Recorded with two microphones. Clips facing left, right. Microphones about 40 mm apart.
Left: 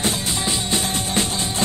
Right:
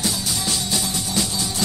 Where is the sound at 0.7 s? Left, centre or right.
Left.